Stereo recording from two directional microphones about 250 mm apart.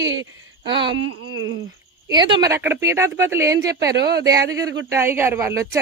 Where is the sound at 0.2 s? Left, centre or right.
Centre.